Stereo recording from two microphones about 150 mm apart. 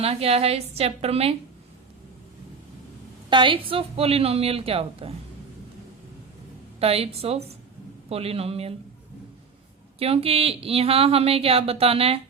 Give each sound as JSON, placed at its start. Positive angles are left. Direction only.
{"t": 0.0, "sound": "speech", "side_deg": -40}
{"t": 3.2, "sound": "speech", "side_deg": -35}
{"t": 6.7, "sound": "speech", "side_deg": -40}
{"t": 10.0, "sound": "speech", "side_deg": -40}